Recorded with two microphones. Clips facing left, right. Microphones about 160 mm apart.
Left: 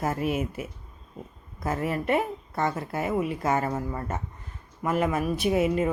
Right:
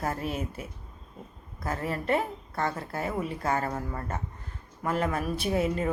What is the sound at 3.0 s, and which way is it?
Speech, 10° left (ahead or behind).